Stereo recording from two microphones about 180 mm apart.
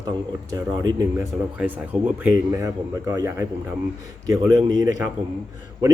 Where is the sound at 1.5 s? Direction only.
10° right (ahead or behind).